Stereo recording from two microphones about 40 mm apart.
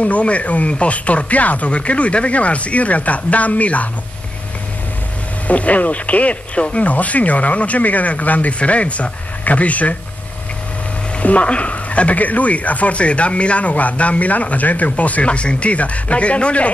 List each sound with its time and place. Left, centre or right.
0.0 s speech: left
5.5 s speech: left
11.1 s speech: left